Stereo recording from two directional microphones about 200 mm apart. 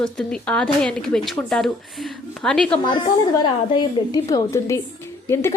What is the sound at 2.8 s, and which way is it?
A woman's voice, 25° left (ahead or behind).